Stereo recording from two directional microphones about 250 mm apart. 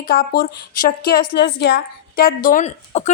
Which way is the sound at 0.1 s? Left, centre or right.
Left.